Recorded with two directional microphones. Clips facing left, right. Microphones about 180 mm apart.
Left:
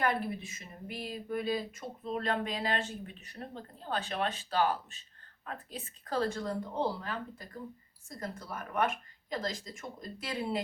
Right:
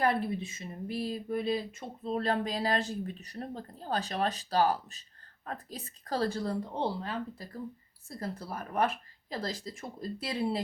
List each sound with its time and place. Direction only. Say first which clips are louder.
0.0 s speech: right 3 dB; 30° right (ahead or behind)